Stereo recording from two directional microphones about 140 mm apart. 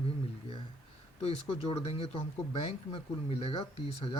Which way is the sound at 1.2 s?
45° left (ahead or behind).